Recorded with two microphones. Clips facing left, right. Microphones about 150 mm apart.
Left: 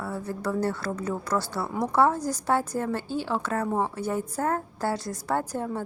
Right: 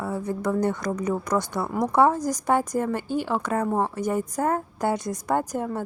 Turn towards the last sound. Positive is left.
turn(degrees=-10)  # may be behind; listen again after turning